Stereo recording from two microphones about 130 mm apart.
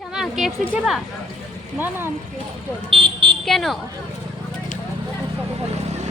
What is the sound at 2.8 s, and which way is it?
Speech, 45° right (ahead or behind).